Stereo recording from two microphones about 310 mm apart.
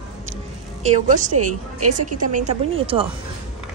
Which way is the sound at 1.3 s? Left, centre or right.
Right.